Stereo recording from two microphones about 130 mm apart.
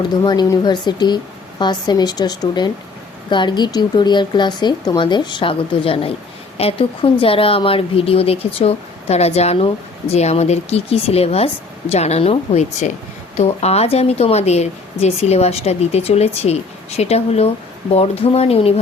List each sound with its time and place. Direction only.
0.6 s a woman's voice: 35° left (ahead or behind); by 18.7 s 50° left (ahead or behind)